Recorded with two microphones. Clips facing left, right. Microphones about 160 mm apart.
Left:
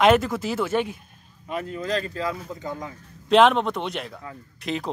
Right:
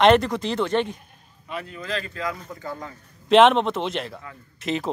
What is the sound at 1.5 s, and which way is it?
Speech, 45° left (ahead or behind).